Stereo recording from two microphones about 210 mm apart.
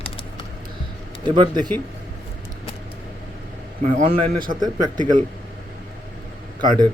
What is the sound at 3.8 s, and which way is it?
Speech, 35° right (ahead or behind).